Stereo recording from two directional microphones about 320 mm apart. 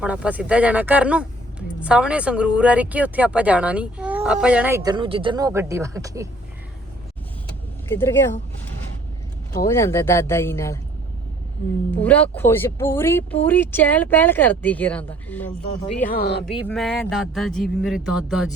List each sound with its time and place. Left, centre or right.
0.0 s speech: centre
7.9 s speech: centre
9.6 s speech: centre
11.9 s speech: centre
16.0 s speech: left
16.5 s speech: centre